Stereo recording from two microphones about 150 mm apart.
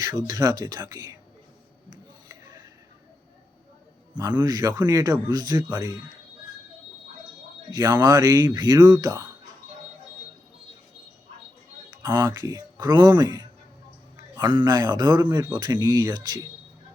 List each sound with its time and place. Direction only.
0.0 s speech: 25° right (ahead or behind)
4.2 s speech: 20° right (ahead or behind)
7.7 s speech: 25° right (ahead or behind)
12.0 s speech: 20° right (ahead or behind)